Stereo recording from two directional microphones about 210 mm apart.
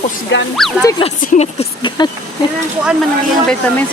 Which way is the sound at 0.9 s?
25° left (ahead or behind).